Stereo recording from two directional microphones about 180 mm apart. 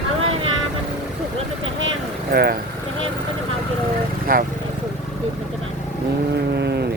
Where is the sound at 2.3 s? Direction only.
60° right (ahead or behind).